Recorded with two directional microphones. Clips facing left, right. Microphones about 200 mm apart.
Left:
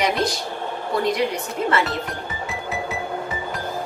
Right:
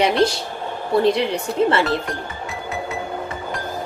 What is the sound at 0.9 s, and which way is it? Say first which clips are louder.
Speech: right 4 dB; 30° right (ahead or behind).